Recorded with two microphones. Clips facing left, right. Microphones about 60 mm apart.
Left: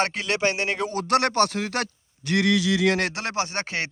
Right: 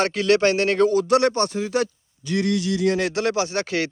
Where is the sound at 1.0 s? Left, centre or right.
Left.